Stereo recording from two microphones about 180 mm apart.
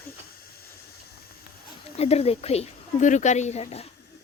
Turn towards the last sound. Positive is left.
turn(degrees=35)  # may be behind; listen again after turning